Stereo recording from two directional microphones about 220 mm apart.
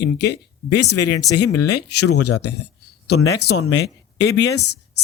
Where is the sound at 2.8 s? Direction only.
90° left.